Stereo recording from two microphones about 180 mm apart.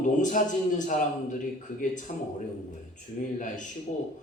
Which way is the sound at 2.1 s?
40° left (ahead or behind).